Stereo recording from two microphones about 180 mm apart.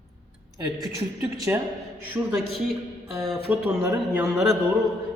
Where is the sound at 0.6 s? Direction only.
20° right (ahead or behind).